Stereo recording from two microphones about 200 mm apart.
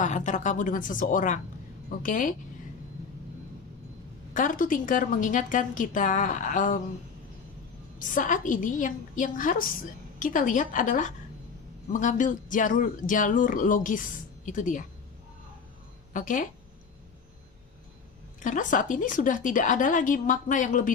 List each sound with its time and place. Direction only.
0.0 s a woman's voice: 40° left (ahead or behind)
4.4 s speech: 40° left (ahead or behind)
7.9 s speech: 40° left (ahead or behind)
16.1 s speech: 40° left (ahead or behind)
18.3 s speech: 40° left (ahead or behind)